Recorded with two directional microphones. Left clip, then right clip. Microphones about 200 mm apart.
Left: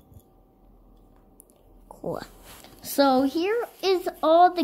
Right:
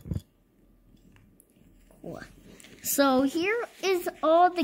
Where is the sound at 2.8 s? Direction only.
40° right (ahead or behind).